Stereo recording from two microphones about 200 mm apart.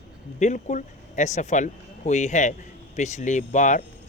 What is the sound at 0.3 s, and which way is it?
Speech, 35° left (ahead or behind).